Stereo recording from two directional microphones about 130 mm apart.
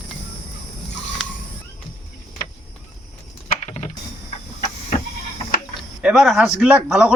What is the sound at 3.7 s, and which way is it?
Mechanisms, 65° left (ahead or behind).